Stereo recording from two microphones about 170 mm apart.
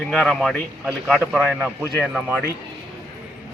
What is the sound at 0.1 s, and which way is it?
Speech, 5° left (ahead or behind).